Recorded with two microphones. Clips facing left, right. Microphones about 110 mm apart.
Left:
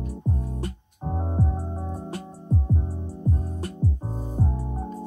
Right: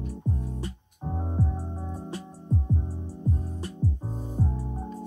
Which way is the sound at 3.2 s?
50° left (ahead or behind).